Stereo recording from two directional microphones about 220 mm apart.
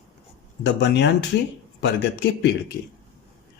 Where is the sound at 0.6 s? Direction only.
50° left (ahead or behind).